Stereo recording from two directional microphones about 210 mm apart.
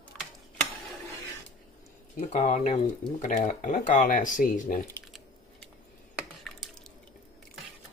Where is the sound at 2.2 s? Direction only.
35° left (ahead or behind).